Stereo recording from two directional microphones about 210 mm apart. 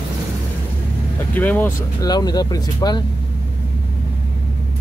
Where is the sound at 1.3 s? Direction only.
5° left (ahead or behind).